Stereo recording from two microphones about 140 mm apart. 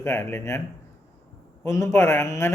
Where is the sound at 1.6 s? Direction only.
20° left (ahead or behind).